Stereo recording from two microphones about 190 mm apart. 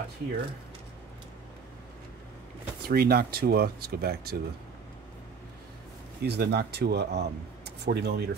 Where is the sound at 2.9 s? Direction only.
55° right (ahead or behind).